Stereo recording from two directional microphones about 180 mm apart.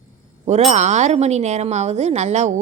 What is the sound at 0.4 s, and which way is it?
A woman's voice, 40° right (ahead or behind).